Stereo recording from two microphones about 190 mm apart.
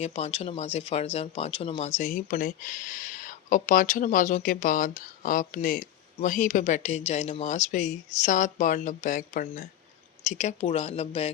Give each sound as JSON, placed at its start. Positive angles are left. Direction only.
{"t": 0.0, "sound": "speech", "side_deg": 35}